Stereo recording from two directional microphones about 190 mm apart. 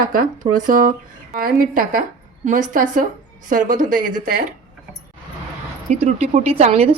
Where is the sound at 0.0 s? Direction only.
50° right (ahead or behind).